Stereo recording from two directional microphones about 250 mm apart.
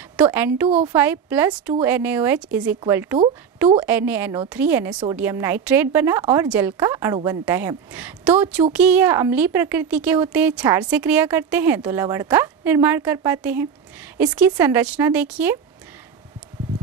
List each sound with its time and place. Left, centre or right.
0.2 s a woman's voice: centre